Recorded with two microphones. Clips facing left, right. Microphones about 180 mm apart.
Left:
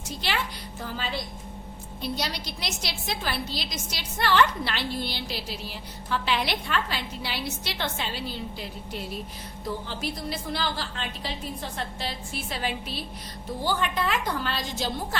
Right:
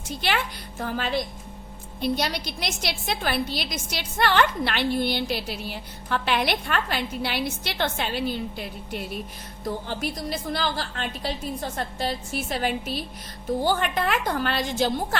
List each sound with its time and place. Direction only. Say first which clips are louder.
0.2 s music: right 4 dB; 55° right (ahead or behind)
2.0 s a woman's voice: right 6 dB; 55° right (ahead or behind)